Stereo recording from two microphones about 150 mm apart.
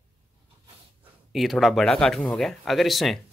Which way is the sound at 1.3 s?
Centre (ahead or behind).